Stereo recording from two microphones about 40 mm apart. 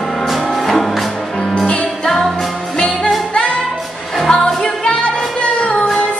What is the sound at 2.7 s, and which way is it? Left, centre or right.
Music, left.